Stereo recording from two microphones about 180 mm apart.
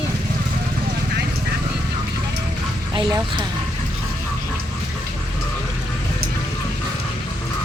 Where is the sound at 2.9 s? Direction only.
25° right (ahead or behind).